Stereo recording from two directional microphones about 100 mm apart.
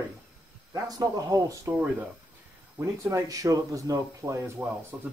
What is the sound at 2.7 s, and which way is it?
Speech, 30° right (ahead or behind).